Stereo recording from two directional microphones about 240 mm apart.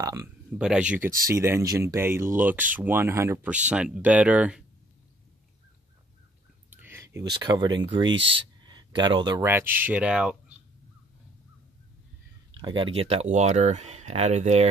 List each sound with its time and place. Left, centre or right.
0.0 s a sound: centre
0.7 s speech: centre
6.7 s speech: centre
12.5 s speech: right